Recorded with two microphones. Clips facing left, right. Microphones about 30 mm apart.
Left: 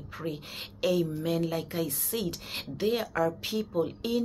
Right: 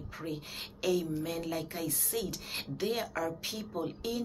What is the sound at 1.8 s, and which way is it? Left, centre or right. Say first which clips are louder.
Speech: left 3 dB; left.